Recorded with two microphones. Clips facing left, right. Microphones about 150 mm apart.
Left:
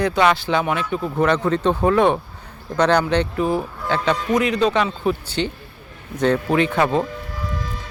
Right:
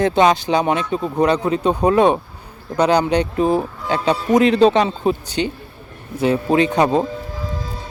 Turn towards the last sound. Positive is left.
turn(degrees=-30)  # may be behind; listen again after turning